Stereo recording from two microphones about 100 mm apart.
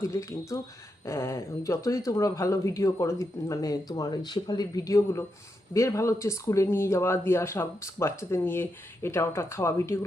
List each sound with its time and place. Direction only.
0.0 s speech: 35° left (ahead or behind)